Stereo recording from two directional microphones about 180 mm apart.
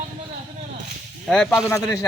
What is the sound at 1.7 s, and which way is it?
Speech, 15° left (ahead or behind).